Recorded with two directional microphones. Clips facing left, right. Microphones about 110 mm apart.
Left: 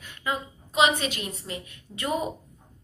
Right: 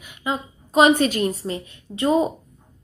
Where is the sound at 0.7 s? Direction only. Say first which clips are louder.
Right 8 dB; 45° right (ahead or behind).